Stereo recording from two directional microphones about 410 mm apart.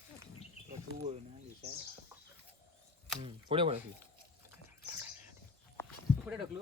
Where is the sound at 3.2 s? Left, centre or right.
Centre.